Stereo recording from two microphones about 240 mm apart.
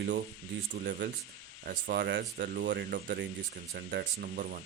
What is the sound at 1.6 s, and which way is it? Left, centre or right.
Speech, right.